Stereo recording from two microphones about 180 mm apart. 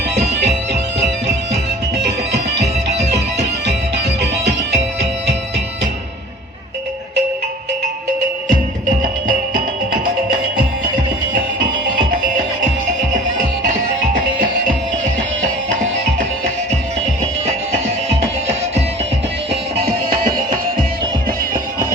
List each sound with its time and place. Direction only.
0.1 s music: 70° right (ahead or behind)
3.7 s music: 70° right (ahead or behind)
9.0 s music: 45° right (ahead or behind)
19.8 s music: 55° right (ahead or behind)
21.5 s music: 20° right (ahead or behind)